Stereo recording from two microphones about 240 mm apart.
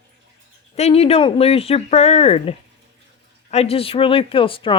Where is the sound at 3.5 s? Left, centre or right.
Left.